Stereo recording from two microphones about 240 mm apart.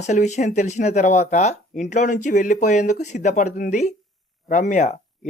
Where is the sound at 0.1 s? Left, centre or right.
Left.